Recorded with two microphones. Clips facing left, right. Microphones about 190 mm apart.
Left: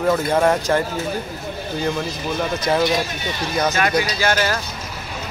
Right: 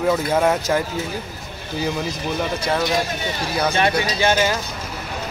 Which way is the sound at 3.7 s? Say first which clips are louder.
Even; 30° right (ahead or behind).